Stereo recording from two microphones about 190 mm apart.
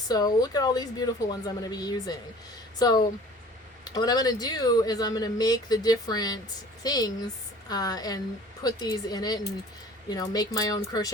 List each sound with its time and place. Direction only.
0.1 s speech: 20° left (ahead or behind)